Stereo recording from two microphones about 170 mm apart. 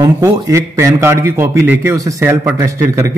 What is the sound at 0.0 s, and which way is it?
A man's voice, 20° right (ahead or behind).